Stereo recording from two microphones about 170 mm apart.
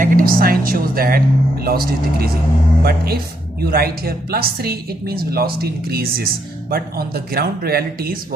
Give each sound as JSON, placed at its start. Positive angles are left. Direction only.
{"t": 0.0, "sound": "a woman's voice", "side_deg": -55}